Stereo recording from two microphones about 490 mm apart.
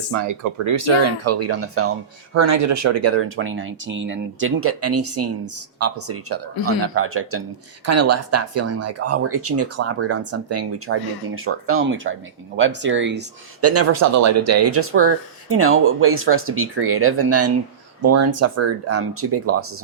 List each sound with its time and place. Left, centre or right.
0.1 s speech: right